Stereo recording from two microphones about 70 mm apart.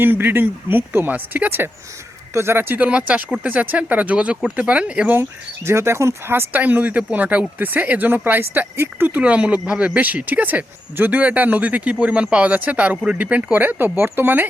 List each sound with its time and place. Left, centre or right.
0.0 s speech: right
5.1 s speech: right